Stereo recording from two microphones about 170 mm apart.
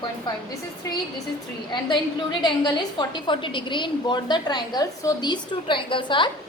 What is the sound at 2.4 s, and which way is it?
A woman's voice, 25° left (ahead or behind).